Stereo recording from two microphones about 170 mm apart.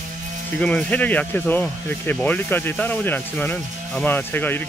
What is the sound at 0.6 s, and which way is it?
Speech, 5° left (ahead or behind).